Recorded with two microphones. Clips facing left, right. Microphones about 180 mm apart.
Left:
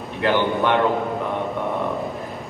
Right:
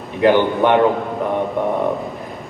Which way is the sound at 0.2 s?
15° right (ahead or behind).